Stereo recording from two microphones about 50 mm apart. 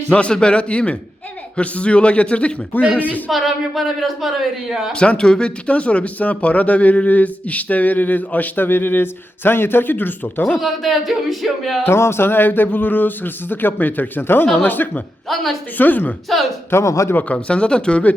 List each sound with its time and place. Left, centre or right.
0.1 s a man's voice: left
3.2 s speech: centre
4.9 s speech: centre; by 10.4 s left
10.6 s speech: centre
11.8 s speech: left
16.7 s a man's voice: left
17.2 s a man's voice: left